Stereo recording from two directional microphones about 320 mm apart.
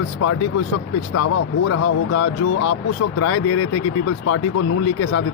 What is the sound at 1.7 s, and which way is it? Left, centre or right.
Speech, left.